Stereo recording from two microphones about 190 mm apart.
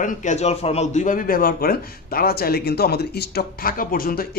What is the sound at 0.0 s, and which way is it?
A man's voice, 40° left (ahead or behind).